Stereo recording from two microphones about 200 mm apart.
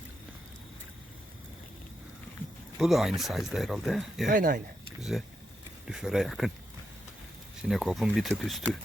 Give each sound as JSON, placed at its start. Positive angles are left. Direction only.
{"t": 2.7, "sound": "speech", "side_deg": 0}
{"t": 4.4, "sound": "speech", "side_deg": -45}
{"t": 4.9, "sound": "speech", "side_deg": 0}
{"t": 7.7, "sound": "speech", "side_deg": 0}